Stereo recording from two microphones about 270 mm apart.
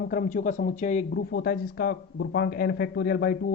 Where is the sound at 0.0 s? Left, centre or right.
Left.